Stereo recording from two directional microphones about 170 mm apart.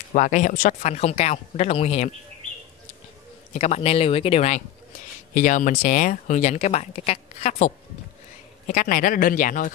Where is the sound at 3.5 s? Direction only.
40° left (ahead or behind).